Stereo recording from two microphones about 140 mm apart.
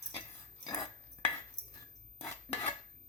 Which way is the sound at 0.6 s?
25° left (ahead or behind).